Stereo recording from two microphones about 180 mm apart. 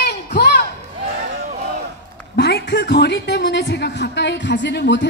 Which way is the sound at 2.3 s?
65° left (ahead or behind).